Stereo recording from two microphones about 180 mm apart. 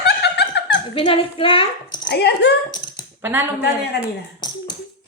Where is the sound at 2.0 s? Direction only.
65° left (ahead or behind).